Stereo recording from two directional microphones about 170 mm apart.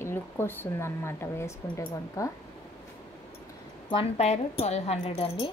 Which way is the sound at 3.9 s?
35° left (ahead or behind).